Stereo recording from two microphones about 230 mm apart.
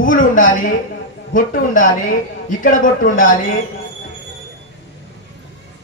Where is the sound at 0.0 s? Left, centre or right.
Left.